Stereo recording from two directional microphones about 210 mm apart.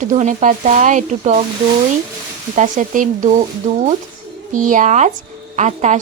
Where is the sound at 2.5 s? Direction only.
35° right (ahead or behind).